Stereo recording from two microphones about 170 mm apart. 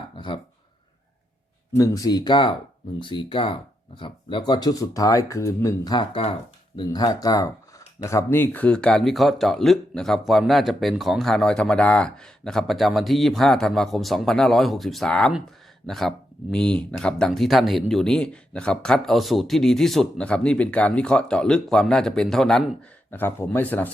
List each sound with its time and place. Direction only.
1.7 s speech: 20° left (ahead or behind)